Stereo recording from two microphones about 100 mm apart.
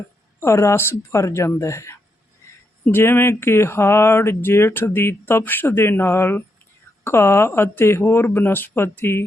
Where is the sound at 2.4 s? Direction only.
30° left (ahead or behind).